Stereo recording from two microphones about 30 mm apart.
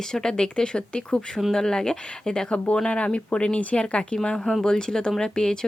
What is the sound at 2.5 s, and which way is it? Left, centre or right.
Speech, left.